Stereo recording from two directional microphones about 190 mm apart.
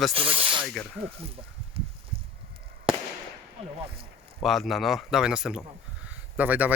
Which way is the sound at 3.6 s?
30° right (ahead or behind).